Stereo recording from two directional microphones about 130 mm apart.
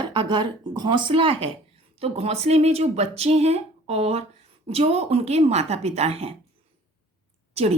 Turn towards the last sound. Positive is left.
turn(degrees=-50)  # may be behind; listen again after turning